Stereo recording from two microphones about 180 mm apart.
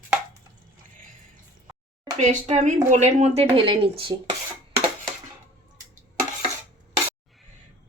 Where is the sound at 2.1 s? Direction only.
40° right (ahead or behind).